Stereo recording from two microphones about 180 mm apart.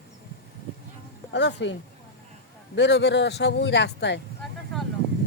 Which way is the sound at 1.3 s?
75° left (ahead or behind).